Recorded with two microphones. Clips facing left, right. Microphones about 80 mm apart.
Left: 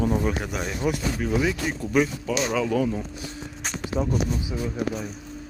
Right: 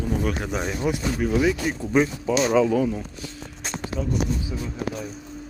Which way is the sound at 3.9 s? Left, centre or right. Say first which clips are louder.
Left 4 dB; left.